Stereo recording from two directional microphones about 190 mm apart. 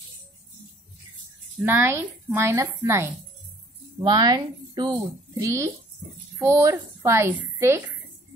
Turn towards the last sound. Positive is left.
turn(degrees=-15)  # may be behind; listen again after turning